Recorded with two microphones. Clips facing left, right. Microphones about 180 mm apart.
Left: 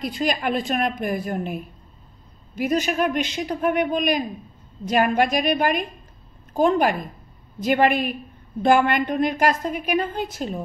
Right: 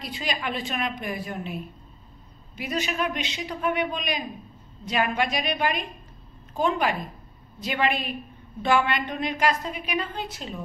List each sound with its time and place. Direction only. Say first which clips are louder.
0.0 s a woman's voice: left 7 dB; 45° left (ahead or behind)